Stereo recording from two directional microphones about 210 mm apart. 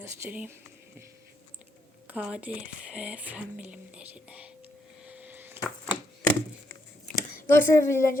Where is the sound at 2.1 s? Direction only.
5° right (ahead or behind).